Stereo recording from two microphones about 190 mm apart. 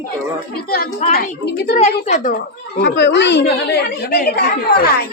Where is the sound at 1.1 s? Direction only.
55° left (ahead or behind).